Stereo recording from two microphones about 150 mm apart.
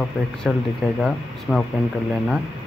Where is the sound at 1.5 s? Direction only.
15° right (ahead or behind).